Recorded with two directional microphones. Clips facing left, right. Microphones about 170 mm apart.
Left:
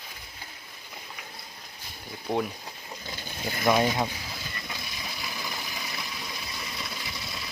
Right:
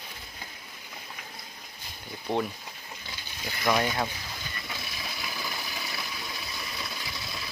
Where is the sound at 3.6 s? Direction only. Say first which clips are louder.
Left 3 dB; 20° left (ahead or behind).